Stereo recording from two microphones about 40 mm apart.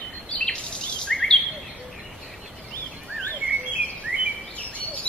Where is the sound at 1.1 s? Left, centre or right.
Centre.